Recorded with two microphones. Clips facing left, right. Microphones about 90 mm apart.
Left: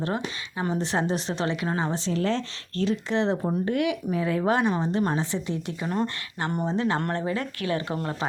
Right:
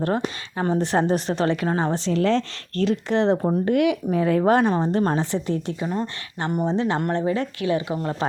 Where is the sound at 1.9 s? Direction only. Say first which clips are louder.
Right 5 dB; 70° right (ahead or behind).